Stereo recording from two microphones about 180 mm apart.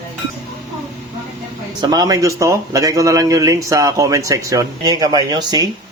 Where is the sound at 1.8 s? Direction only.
20° right (ahead or behind).